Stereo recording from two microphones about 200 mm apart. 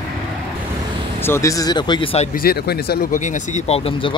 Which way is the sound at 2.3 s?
50° left (ahead or behind).